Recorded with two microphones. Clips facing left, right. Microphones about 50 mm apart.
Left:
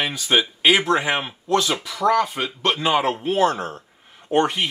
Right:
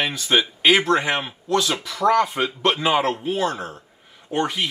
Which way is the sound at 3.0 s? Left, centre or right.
Centre.